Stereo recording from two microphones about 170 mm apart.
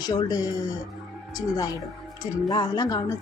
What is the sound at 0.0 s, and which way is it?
A woman's voice, 20° left (ahead or behind).